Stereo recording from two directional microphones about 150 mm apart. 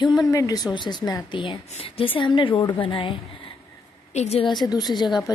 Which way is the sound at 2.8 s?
35° left (ahead or behind).